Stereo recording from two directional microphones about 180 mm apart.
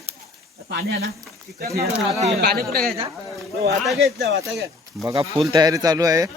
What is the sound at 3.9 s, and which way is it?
Speech, centre (ahead or behind).